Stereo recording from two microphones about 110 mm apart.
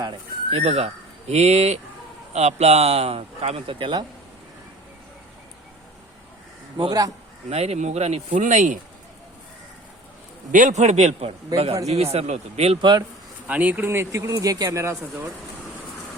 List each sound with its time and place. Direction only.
0.5 s speech: 70° right (ahead or behind); by 4.0 s 50° right (ahead or behind)
6.7 s a man's voice: 40° right (ahead or behind)
7.5 s speech: 70° right (ahead or behind)
10.7 s a man's voice: 90° right
11.5 s speech: 65° right (ahead or behind)
12.1 s speech: 80° right
12.8 s a man's voice: 40° right (ahead or behind)
13.5 s speech: 15° right (ahead or behind)